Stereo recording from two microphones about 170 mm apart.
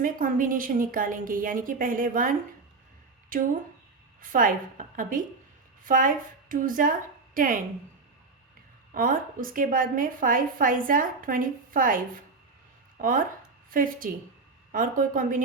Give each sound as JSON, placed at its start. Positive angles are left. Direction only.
{"t": 0.0, "sound": "a woman's voice", "side_deg": -55}
{"t": 8.9, "sound": "a woman's voice", "side_deg": -55}